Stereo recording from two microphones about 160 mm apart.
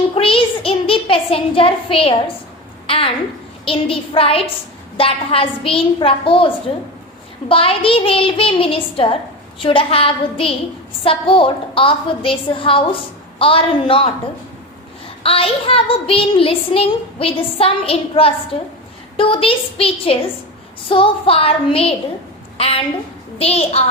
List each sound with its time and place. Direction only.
0.1 s a child's voice: 35° left (ahead or behind)
15.2 s a child's voice: 35° left (ahead or behind)